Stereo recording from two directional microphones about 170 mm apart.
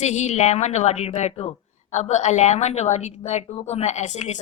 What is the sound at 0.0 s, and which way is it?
A woman's voice, 45° left (ahead or behind).